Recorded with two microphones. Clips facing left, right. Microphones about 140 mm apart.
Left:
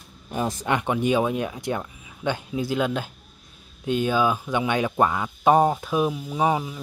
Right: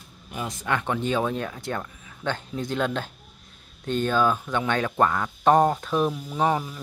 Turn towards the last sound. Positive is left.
turn(degrees=10)  # may be behind; listen again after turning